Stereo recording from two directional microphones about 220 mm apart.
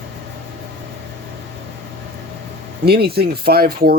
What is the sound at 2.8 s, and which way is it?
Speech, 45° right (ahead or behind).